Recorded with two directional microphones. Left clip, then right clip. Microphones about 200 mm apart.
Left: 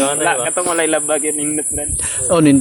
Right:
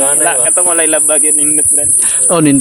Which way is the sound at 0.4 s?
35° right (ahead or behind).